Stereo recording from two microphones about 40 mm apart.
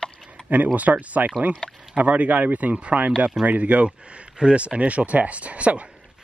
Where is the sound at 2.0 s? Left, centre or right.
Right.